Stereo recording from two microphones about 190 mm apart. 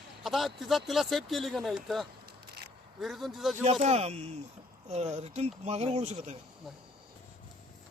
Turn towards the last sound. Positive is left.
turn(degrees=-35)  # may be behind; listen again after turning